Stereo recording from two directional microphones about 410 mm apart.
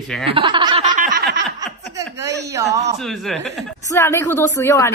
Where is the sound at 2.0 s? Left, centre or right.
Centre.